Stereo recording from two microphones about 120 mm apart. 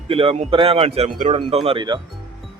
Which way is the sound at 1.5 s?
55° right (ahead or behind).